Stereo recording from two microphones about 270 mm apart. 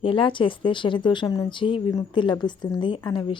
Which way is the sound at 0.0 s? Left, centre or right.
Centre.